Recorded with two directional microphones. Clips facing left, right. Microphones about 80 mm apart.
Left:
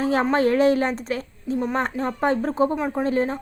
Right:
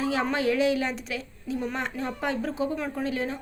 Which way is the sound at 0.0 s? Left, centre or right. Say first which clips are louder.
Left 5 dB; left.